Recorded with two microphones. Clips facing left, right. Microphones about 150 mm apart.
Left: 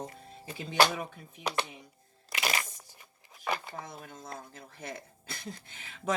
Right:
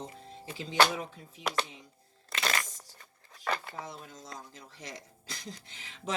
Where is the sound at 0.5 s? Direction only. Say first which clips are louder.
Even; 55° left (ahead or behind).